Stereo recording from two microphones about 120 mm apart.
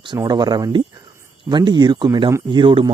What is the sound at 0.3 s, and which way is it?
Speech, 35° right (ahead or behind).